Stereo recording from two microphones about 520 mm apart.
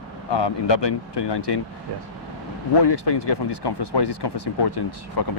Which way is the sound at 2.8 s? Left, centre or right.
Left.